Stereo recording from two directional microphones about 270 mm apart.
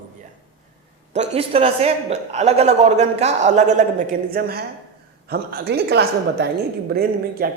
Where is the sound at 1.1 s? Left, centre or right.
Right.